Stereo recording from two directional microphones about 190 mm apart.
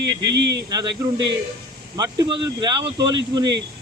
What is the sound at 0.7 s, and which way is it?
Speech, 20° right (ahead or behind).